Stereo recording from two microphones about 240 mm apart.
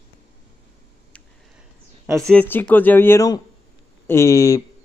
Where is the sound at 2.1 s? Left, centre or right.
Centre.